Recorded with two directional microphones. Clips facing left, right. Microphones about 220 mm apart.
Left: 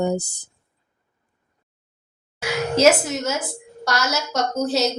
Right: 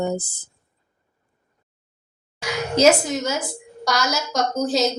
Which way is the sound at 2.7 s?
5° left (ahead or behind).